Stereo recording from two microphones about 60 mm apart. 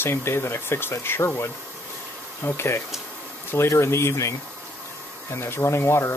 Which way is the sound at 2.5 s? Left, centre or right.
Left.